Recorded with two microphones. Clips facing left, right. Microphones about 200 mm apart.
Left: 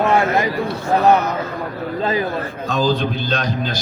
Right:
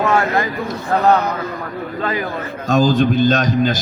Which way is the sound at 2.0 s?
25° left (ahead or behind).